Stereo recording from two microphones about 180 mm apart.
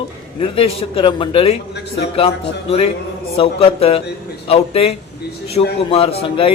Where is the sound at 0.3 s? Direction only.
30° left (ahead or behind).